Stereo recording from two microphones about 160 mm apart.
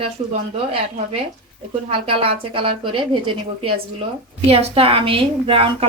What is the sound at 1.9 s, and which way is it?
A woman's voice, 35° right (ahead or behind).